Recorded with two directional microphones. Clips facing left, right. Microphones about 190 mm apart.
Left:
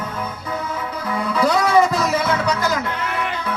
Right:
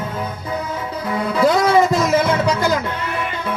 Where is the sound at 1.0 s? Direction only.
25° right (ahead or behind).